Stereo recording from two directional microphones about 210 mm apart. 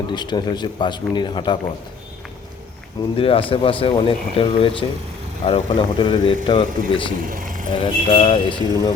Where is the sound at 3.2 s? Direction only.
25° left (ahead or behind).